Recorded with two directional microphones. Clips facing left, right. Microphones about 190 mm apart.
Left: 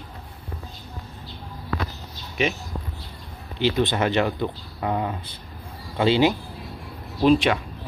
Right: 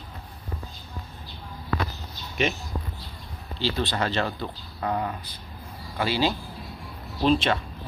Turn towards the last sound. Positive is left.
turn(degrees=10)  # may be behind; listen again after turning